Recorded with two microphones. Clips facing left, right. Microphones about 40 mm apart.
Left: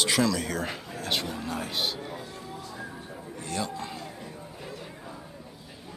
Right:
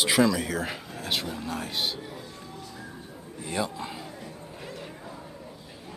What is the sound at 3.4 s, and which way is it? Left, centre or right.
Music, centre.